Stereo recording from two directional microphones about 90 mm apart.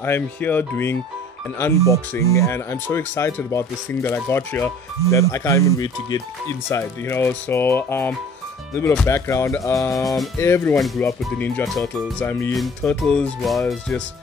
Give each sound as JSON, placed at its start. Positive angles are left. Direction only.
{"t": 0.0, "sound": "speech", "side_deg": 20}
{"t": 5.1, "sound": "speech", "side_deg": 35}
{"t": 6.8, "sound": "speech", "side_deg": 25}
{"t": 10.0, "sound": "speech", "side_deg": 0}
{"t": 10.4, "sound": "speech", "side_deg": 25}
{"t": 11.6, "sound": "speech", "side_deg": 0}